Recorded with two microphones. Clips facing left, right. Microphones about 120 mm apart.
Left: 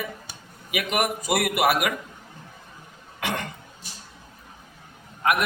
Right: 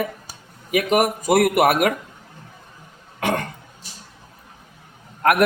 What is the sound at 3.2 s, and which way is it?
Throat clearing, 45° right (ahead or behind).